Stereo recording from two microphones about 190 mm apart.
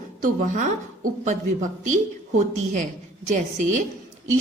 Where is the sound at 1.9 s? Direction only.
40° right (ahead or behind).